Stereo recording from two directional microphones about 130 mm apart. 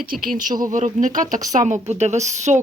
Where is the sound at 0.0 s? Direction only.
90° right.